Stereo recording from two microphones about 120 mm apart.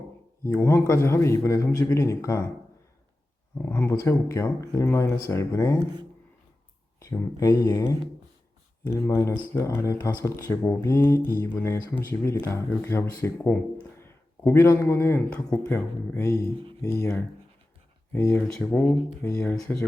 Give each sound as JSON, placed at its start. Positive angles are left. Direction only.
{"t": 0.4, "sound": "speech", "side_deg": 20}
{"t": 3.6, "sound": "speech", "side_deg": 20}
{"t": 7.0, "sound": "a man's voice", "side_deg": 25}
{"t": 15.3, "sound": "speech", "side_deg": 10}
{"t": 15.7, "sound": "speech", "side_deg": 25}
{"t": 18.4, "sound": "speech", "side_deg": 5}
{"t": 19.2, "sound": "speech", "side_deg": 20}